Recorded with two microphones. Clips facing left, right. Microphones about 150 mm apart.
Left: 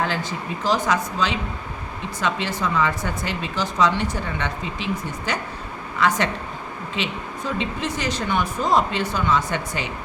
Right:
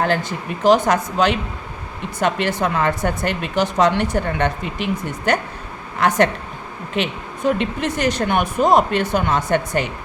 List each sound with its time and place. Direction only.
0.6 s speech: 60° right (ahead or behind)